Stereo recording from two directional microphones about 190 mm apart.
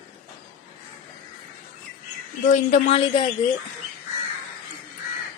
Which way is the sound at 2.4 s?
35° left (ahead or behind).